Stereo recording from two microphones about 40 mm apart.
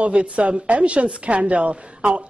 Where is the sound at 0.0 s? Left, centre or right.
Right.